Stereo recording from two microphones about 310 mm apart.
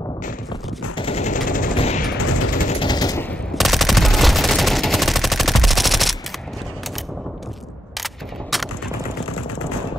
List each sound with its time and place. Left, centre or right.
0.9 s machine gun: centre
8.0 s single-lens reflex camera: centre